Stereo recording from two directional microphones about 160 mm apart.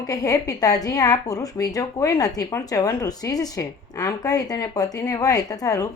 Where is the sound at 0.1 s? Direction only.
20° left (ahead or behind).